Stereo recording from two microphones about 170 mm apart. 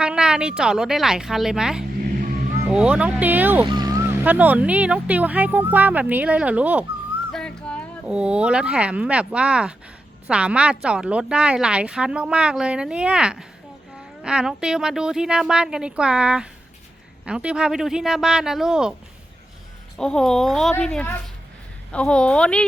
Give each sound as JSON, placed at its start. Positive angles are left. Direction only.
{"t": 0.0, "sound": "a woman's voice", "side_deg": -5}
{"t": 3.7, "sound": "vehicle", "side_deg": -25}
{"t": 4.2, "sound": "speech", "side_deg": -10}
{"t": 7.3, "sound": "a sound", "side_deg": 5}
{"t": 8.0, "sound": "a woman's voice", "side_deg": -5}
{"t": 20.0, "sound": "a woman's voice", "side_deg": 5}